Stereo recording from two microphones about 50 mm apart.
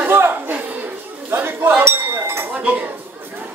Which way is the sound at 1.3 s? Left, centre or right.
Right.